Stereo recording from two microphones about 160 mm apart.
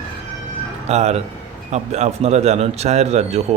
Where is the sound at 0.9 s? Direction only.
45° right (ahead or behind).